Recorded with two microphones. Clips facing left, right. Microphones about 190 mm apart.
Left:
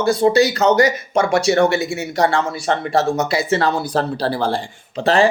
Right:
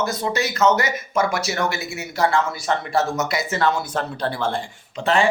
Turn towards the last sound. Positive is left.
turn(degrees=35)  # may be behind; listen again after turning